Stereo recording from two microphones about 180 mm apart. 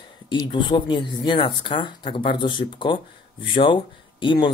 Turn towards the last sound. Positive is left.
turn(degrees=25)  # may be behind; listen again after turning